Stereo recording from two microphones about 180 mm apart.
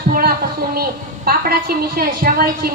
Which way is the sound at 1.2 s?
55° right (ahead or behind).